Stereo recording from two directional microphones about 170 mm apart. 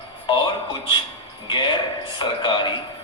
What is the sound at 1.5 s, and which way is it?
Speech, 30° left (ahead or behind).